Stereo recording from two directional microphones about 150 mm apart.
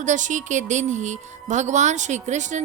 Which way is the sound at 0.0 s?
55° right (ahead or behind).